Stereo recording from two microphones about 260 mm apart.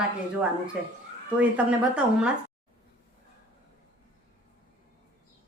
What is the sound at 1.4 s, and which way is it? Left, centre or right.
Speech, centre.